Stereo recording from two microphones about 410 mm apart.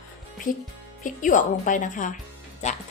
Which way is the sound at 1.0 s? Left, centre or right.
Centre.